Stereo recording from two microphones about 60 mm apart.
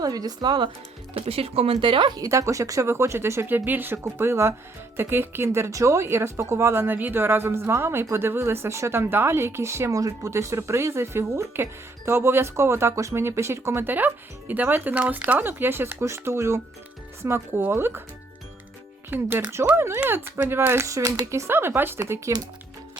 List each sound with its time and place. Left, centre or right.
0.0 s speech: right
2.1 s speech: right
3.5 s speech: right
4.0 s speech: right
9.9 s speech: right
13.9 s speech: right
19.1 s speech: right
21.5 s speech: right
21.9 s speech: right